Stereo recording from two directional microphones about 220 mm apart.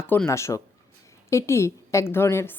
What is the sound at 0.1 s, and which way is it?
A woman's voice, 10° left (ahead or behind).